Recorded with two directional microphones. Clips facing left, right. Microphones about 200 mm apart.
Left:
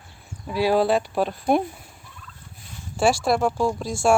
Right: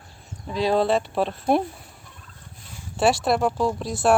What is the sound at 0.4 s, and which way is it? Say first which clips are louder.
A woman's voice: left 1 dB; 5° left (ahead or behind).